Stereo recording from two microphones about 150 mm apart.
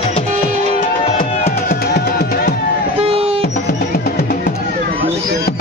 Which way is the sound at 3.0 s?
40° right (ahead or behind).